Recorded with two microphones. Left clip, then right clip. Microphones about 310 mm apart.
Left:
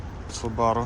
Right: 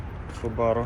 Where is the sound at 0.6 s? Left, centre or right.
Centre.